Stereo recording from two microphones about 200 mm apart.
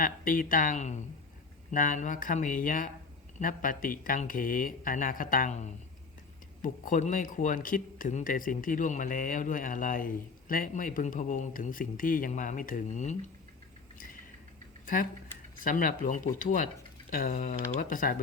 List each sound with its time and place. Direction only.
0.0 s speech: 45° left (ahead or behind)
15.6 s speech: 45° left (ahead or behind)